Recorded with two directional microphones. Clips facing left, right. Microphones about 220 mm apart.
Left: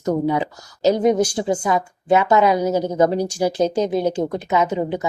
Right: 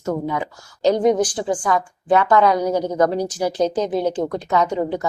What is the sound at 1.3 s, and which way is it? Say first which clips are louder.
Speech: left 1 dB; 25° left (ahead or behind).